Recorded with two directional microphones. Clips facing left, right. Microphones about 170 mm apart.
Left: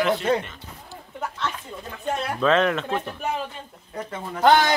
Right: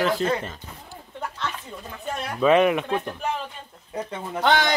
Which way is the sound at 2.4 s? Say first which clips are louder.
Right 3 dB; 10° right (ahead or behind).